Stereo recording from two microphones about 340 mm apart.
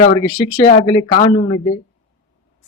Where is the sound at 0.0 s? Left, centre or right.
Centre.